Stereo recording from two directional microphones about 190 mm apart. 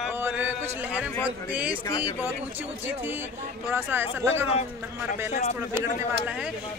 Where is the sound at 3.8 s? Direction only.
10° right (ahead or behind).